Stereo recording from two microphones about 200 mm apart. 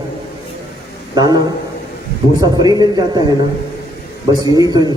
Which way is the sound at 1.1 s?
20° right (ahead or behind).